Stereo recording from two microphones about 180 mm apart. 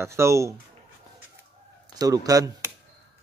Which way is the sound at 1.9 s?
20° right (ahead or behind).